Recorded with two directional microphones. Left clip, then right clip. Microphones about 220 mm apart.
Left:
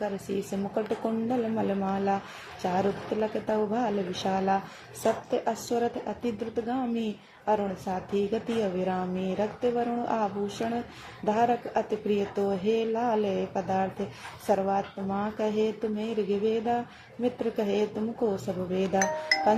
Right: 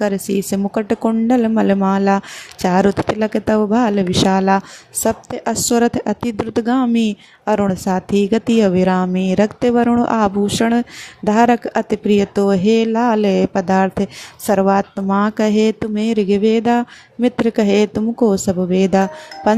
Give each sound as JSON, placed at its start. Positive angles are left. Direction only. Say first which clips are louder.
{"t": 0.0, "sound": "a woman's voice", "louder": "right 13 dB", "side_deg": -55}